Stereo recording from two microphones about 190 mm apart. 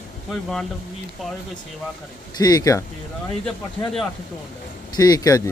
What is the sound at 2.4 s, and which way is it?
Speech, 20° left (ahead or behind).